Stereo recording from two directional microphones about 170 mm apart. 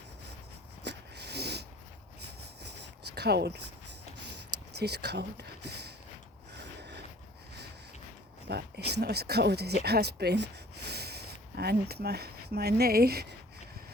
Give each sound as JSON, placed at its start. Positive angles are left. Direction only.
{"t": 0.9, "sound": "snort", "side_deg": -80}
{"t": 3.2, "sound": "speech", "side_deg": -75}
{"t": 4.7, "sound": "speech", "side_deg": -75}
{"t": 6.5, "sound": "a sound", "side_deg": -80}
{"t": 8.4, "sound": "speech", "side_deg": -75}